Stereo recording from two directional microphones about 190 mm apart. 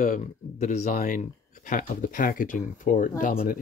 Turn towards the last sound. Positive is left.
turn(degrees=50)  # may be behind; listen again after turning